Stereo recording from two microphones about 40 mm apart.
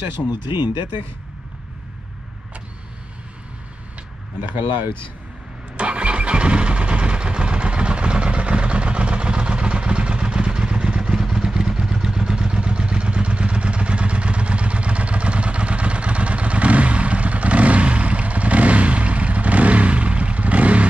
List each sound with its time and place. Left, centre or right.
0.2 s speech: left
4.4 s speech: right
5.8 s vehicle: right